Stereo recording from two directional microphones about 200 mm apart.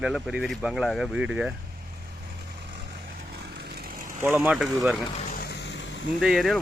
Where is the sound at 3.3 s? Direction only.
50° right (ahead or behind).